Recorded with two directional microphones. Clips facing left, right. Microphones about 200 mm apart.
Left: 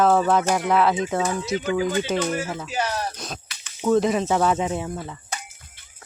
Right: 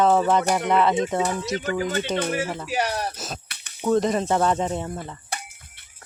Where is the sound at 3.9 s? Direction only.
Centre (ahead or behind).